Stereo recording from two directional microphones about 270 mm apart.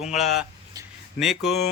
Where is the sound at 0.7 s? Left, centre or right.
Centre.